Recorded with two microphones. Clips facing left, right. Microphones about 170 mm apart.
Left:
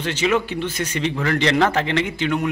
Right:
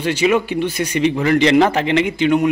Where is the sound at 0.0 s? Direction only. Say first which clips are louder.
Right 4 dB; 10° right (ahead or behind).